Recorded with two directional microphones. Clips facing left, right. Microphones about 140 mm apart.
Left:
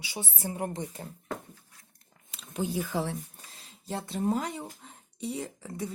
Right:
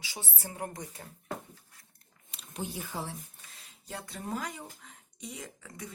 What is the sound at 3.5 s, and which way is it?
Speech, 30° left (ahead or behind).